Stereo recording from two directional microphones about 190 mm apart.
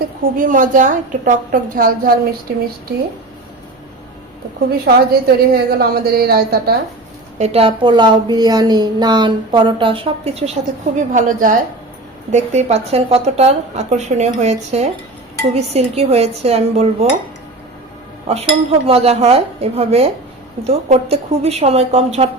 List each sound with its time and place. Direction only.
0.2 s a woman's voice: 45° right (ahead or behind)
4.9 s a woman's voice: 55° right (ahead or behind)
7.3 s a woman's voice: 35° right (ahead or behind)
18.3 s a woman's voice: 30° right (ahead or behind)